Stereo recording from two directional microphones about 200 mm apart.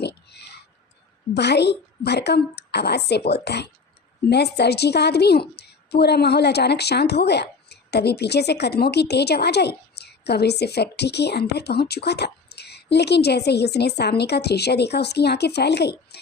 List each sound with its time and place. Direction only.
0.0 s clicking: 55° left (ahead or behind)
1.3 s a woman's voice: 55° left (ahead or behind)